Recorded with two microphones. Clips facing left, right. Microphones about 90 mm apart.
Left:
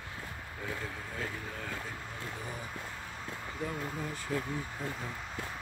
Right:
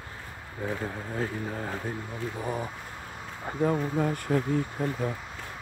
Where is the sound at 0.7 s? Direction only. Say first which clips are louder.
Right 7 dB; 35° right (ahead or behind).